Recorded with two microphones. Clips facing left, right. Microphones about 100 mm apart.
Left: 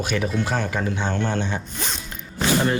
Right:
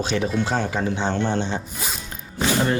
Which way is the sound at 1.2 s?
20° right (ahead or behind).